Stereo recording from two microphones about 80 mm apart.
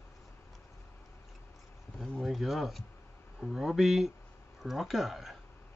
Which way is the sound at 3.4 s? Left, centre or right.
Centre.